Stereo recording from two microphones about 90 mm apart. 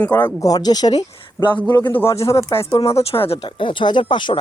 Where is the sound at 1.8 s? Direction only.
20° left (ahead or behind).